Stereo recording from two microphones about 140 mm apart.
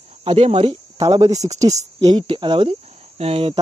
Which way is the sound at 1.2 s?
55° right (ahead or behind).